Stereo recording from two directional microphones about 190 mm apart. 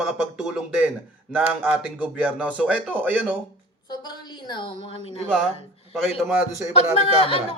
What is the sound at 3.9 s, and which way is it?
A woman's voice, 20° left (ahead or behind).